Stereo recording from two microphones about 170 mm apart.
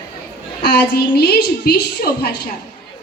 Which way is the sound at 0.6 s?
70° left (ahead or behind).